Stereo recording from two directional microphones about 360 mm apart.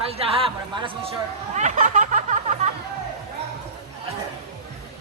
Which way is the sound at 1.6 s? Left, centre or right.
Right.